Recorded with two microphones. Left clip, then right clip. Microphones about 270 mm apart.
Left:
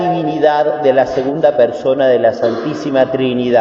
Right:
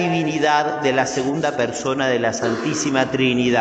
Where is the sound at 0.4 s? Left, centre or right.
Right.